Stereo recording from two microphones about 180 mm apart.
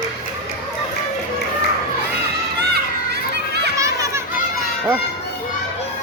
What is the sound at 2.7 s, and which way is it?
Children playing, 65° right (ahead or behind).